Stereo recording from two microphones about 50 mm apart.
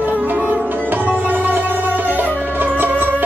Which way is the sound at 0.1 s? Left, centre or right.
Right.